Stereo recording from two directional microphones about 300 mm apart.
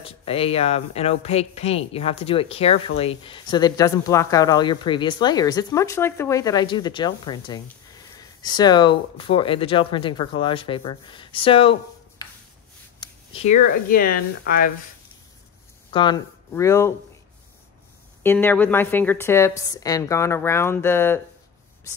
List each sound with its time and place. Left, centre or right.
0.0 s speech: centre
15.9 s speech: centre
18.2 s speech: centre